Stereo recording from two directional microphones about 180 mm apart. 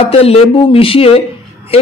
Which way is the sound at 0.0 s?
35° left (ahead or behind).